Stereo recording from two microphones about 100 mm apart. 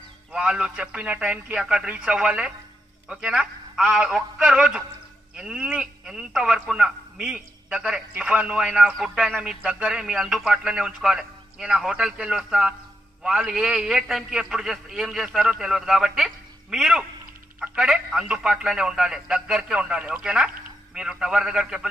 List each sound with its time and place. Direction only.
0.3 s a man's voice: 10° right (ahead or behind)